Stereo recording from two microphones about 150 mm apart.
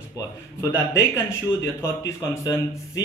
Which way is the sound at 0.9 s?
15° left (ahead or behind).